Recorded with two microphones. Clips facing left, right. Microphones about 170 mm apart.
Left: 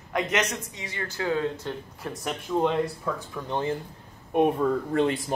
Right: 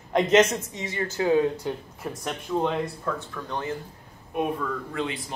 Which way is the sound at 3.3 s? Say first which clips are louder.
Left 3 dB; 20° left (ahead or behind).